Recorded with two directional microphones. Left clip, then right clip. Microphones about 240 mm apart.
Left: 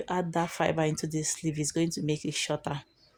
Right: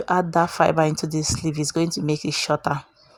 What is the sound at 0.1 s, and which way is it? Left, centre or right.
Speech, right.